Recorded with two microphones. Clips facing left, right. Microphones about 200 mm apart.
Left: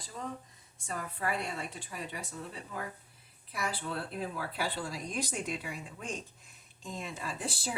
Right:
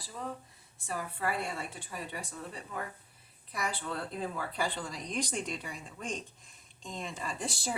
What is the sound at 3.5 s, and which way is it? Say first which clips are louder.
Speech: even; 5° left (ahead or behind).